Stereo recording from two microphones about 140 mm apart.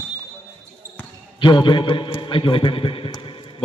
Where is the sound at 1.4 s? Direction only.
35° left (ahead or behind).